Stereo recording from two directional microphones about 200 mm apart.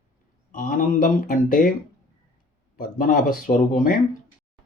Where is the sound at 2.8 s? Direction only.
40° left (ahead or behind).